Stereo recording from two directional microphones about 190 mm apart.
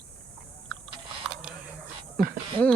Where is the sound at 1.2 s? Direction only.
Centre (ahead or behind).